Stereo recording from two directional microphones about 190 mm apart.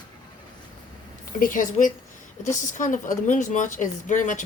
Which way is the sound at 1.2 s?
45° left (ahead or behind).